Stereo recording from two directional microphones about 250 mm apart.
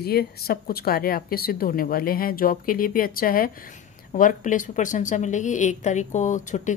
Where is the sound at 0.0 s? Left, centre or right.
Left.